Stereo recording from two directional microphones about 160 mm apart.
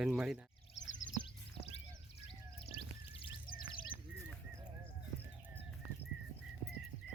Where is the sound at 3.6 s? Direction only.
30° left (ahead or behind).